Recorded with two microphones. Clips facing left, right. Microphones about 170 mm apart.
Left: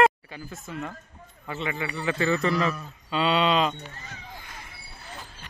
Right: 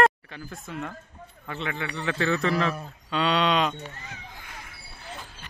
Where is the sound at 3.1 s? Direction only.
5° left (ahead or behind).